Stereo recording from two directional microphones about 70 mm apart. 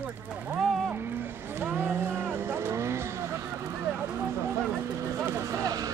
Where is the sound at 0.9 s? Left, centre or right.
Right.